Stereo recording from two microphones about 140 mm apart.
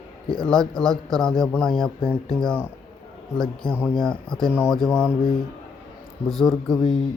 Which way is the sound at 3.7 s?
10° left (ahead or behind).